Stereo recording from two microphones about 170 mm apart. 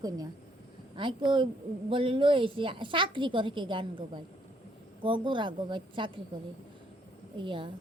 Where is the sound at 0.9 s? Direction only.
30° right (ahead or behind).